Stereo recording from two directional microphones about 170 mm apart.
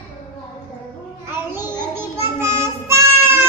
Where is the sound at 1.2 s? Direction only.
15° right (ahead or behind).